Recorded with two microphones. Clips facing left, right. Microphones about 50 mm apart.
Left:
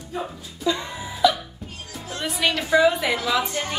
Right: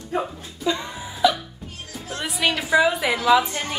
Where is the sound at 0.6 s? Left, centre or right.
Centre.